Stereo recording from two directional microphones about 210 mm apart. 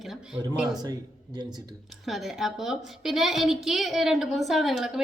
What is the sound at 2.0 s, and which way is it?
A woman's voice, centre (ahead or behind).